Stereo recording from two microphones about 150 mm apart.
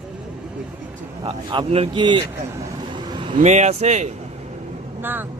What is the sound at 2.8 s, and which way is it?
Vehicle, 30° right (ahead or behind).